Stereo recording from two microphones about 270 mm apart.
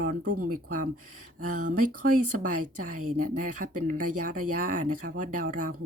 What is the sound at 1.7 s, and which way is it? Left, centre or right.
Speech, right.